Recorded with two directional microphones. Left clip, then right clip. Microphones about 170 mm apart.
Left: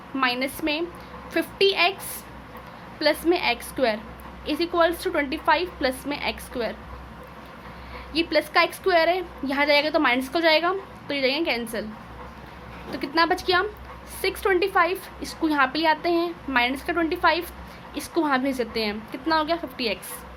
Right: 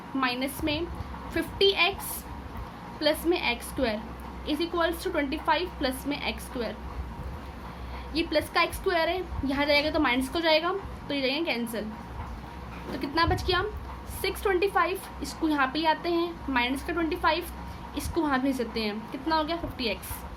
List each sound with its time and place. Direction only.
0.2 s a woman's voice: 25° left (ahead or behind)
3.0 s a woman's voice: 25° left (ahead or behind)
8.1 s a woman's voice: 25° left (ahead or behind)
12.9 s a woman's voice: 25° left (ahead or behind)